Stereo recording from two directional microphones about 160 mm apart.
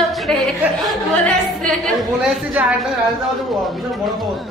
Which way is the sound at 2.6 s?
10° right (ahead or behind).